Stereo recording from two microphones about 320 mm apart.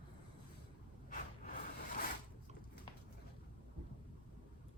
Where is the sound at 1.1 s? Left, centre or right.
Left.